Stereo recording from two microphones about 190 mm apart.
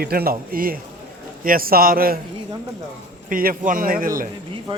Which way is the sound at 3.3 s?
45° right (ahead or behind).